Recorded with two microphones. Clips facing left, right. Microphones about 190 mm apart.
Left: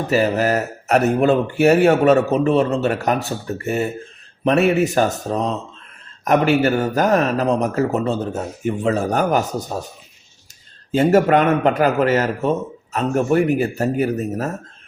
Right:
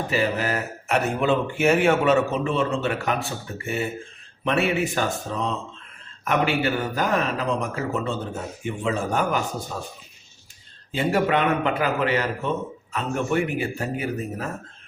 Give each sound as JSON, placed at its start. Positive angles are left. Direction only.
{"t": 0.1, "sound": "speech", "side_deg": 40}
{"t": 10.9, "sound": "speech", "side_deg": 45}